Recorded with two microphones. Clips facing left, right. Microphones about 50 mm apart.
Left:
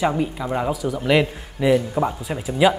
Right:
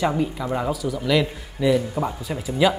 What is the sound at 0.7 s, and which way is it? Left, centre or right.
Speech, left.